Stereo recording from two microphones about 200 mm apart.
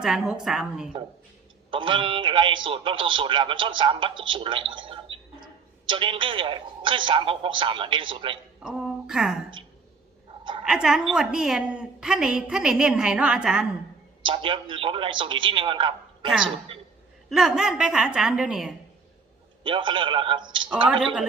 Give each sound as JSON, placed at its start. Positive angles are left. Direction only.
{"t": 0.0, "sound": "a woman's voice", "side_deg": -5}
{"t": 1.7, "sound": "a man's voice", "side_deg": -25}
{"t": 8.6, "sound": "a woman's voice", "side_deg": -5}
{"t": 10.6, "sound": "a woman's voice", "side_deg": -5}
{"t": 14.2, "sound": "a man's voice", "side_deg": -25}
{"t": 17.2, "sound": "a woman's voice", "side_deg": -5}
{"t": 19.6, "sound": "a man's voice", "side_deg": -25}